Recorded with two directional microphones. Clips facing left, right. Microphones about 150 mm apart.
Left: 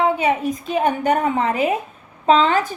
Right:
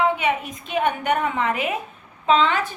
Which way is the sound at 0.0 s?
35° left (ahead or behind).